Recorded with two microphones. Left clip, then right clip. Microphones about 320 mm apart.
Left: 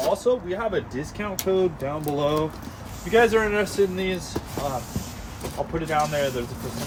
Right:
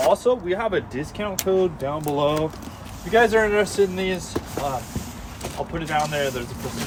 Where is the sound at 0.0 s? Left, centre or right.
Centre.